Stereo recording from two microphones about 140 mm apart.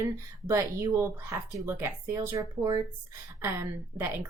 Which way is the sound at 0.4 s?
20° right (ahead or behind).